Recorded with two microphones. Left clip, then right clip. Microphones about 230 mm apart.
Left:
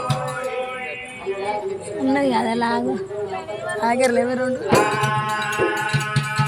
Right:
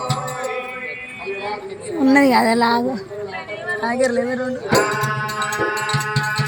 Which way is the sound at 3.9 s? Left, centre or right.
Left.